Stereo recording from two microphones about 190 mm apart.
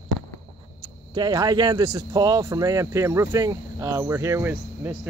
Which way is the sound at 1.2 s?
20° right (ahead or behind).